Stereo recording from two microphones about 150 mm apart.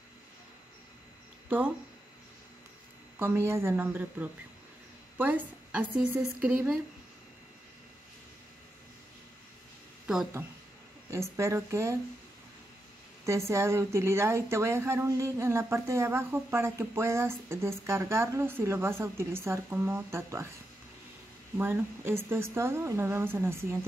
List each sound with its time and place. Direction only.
3.2 s speech: 15° right (ahead or behind)
11.1 s speech: 20° right (ahead or behind)
13.2 s speech: 20° right (ahead or behind)
21.5 s speech: 15° right (ahead or behind)